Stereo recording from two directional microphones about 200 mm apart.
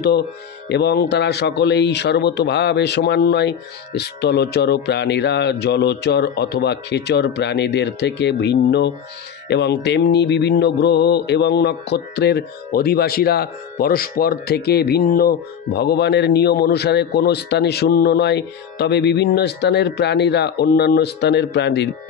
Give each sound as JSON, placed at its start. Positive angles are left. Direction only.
{"t": 0.7, "sound": "mantra", "side_deg": 55}